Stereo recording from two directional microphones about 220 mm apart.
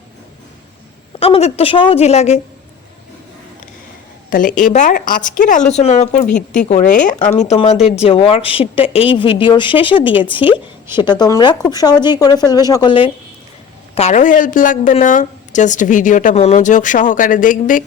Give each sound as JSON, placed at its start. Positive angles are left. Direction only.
{"t": 1.2, "sound": "speech", "side_deg": 30}
{"t": 4.3, "sound": "a woman's voice", "side_deg": 35}